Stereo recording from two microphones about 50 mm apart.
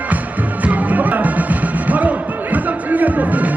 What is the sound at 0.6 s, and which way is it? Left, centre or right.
Music, right.